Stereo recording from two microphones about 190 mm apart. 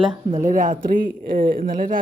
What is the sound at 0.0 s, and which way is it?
Speech, 25° right (ahead or behind).